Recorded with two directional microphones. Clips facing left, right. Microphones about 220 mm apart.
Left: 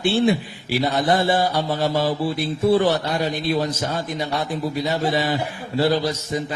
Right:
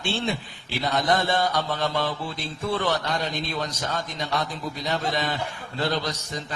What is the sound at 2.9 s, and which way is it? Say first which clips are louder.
Speech: left 5 dB; 15° left (ahead or behind).